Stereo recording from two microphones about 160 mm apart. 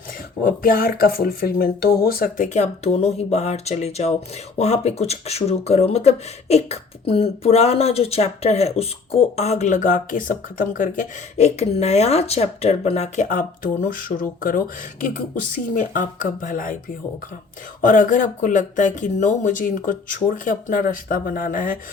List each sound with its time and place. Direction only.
0.4 s speech: 65° left (ahead or behind)
17.7 s speech: 55° left (ahead or behind)